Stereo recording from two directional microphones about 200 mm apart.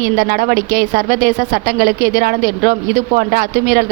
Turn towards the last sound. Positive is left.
turn(degrees=-45)  # may be behind; listen again after turning